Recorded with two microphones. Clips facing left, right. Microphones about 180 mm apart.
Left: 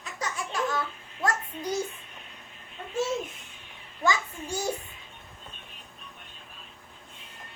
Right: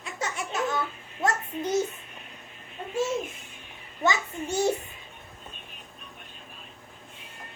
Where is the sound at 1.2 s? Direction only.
25° right (ahead or behind).